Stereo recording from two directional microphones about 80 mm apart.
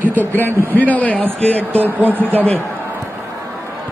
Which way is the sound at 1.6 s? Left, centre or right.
Right.